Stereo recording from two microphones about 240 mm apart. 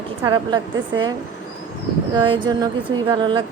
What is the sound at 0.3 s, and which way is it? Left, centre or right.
Speech, centre.